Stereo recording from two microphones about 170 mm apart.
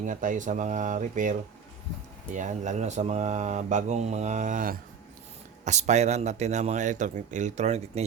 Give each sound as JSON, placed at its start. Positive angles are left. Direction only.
{"t": 0.0, "sound": "speech", "side_deg": -50}